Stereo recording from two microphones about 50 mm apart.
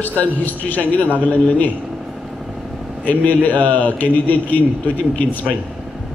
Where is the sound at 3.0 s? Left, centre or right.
Left.